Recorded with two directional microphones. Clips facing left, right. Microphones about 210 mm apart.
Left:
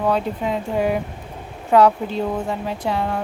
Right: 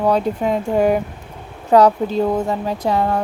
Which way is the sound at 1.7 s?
35° right (ahead or behind).